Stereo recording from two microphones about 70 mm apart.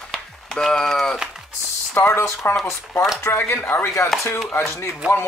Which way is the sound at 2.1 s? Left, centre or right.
Left.